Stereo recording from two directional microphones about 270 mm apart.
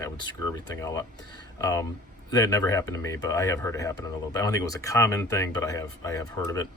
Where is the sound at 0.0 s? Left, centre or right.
Centre.